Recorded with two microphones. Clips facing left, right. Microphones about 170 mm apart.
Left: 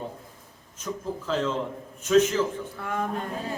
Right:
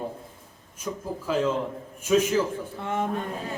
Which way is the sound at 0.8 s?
10° right (ahead or behind).